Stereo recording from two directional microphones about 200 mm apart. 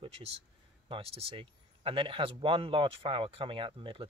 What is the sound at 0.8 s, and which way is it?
Speech, 25° right (ahead or behind).